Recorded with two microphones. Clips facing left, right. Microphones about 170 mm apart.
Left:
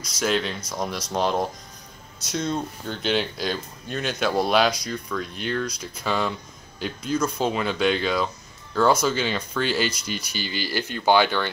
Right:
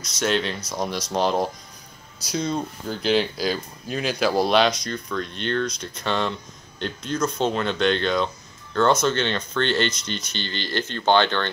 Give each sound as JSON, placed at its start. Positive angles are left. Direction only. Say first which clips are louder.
{"t": 0.0, "sound": "speech", "louder": "right 1 dB", "side_deg": 0}